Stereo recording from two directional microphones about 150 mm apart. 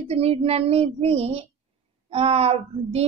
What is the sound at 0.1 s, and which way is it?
A woman's voice, 40° right (ahead or behind).